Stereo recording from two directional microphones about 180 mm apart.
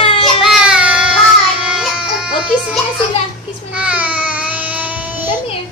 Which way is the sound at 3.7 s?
5° right (ahead or behind).